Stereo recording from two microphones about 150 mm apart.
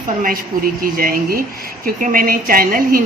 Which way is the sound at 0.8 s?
70° right (ahead or behind).